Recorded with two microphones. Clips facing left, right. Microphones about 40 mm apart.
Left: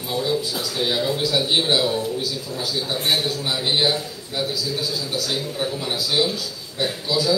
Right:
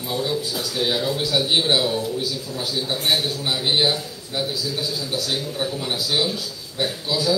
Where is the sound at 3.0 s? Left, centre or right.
Centre.